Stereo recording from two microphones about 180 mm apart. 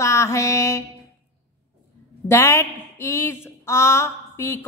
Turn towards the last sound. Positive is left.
turn(degrees=15)  # may be behind; listen again after turning